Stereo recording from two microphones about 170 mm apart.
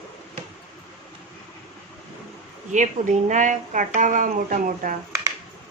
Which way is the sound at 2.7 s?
45° right (ahead or behind).